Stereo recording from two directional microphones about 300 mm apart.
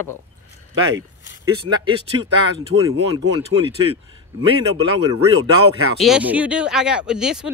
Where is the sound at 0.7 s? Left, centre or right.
Right.